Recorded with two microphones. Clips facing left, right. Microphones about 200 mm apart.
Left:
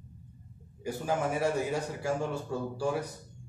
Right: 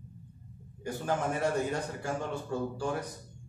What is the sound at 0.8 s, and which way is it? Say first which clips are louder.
A man's voice: left 1 dB; 10° left (ahead or behind).